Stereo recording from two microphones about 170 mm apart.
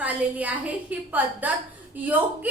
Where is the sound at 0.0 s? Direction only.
10° right (ahead or behind).